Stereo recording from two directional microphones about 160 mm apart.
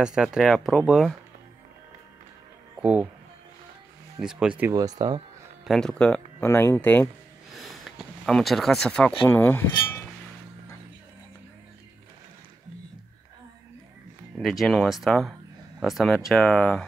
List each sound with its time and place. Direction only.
0.0 s speech: 5° right (ahead or behind)
2.8 s speech: 10° right (ahead or behind)
4.2 s speech: 5° right (ahead or behind)
4.7 s speech: 25° right (ahead or behind)
5.7 s speech: 5° left (ahead or behind)
7.5 s a sound: centre (ahead or behind)
9.2 s speech: 10° left (ahead or behind)
14.4 s speech: centre (ahead or behind)